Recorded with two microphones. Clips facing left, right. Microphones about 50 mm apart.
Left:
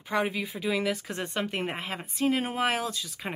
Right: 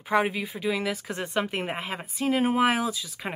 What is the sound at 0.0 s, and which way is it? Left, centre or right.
Speech, centre.